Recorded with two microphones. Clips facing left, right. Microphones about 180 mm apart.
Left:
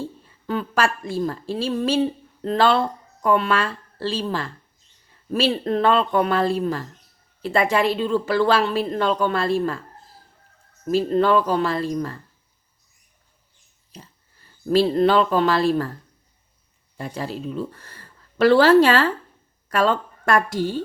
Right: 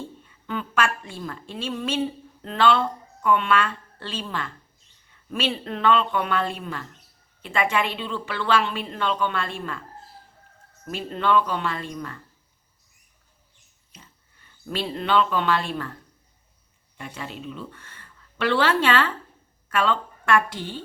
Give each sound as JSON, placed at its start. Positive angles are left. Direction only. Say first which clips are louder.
{"t": 0.0, "sound": "a woman's voice", "louder": "left 6 dB", "side_deg": 35}
{"t": 10.8, "sound": "a woman's voice", "louder": "left 7 dB", "side_deg": 40}
{"t": 13.9, "sound": "speech", "louder": "left 8 dB", "side_deg": 35}
{"t": 17.0, "sound": "a woman's voice", "louder": "left 7 dB", "side_deg": 35}